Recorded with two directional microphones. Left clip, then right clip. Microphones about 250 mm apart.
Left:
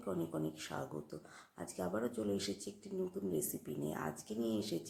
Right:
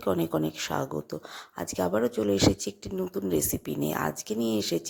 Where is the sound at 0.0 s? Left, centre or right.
Right.